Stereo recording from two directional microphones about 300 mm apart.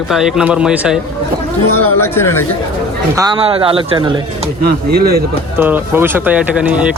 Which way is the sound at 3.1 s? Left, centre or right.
Centre.